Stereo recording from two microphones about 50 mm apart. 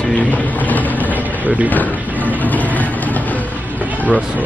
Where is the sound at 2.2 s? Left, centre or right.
Left.